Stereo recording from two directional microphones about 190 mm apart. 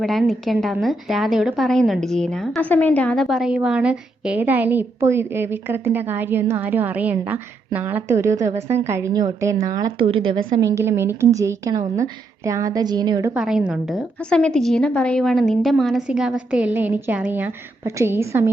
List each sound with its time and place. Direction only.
0.0 s a woman's voice: centre (ahead or behind); by 10.4 s 30° right (ahead or behind)
10.6 s a woman's voice: 15° right (ahead or behind)
13.3 s a woman's voice: 5° right (ahead or behind)